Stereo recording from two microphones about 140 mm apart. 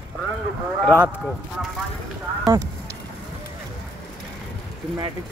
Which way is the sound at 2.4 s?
25° right (ahead or behind).